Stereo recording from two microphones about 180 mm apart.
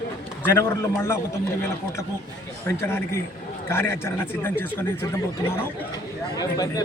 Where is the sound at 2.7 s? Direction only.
15° left (ahead or behind).